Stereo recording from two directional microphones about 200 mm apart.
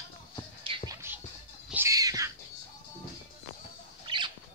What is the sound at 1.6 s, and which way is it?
Cat, 10° right (ahead or behind).